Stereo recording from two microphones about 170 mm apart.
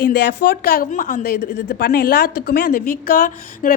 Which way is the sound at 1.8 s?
65° left (ahead or behind).